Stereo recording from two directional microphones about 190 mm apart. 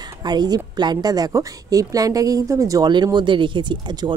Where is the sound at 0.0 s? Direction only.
20° right (ahead or behind).